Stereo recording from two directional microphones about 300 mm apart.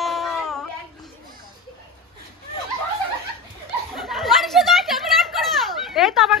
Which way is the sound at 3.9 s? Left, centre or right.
Centre.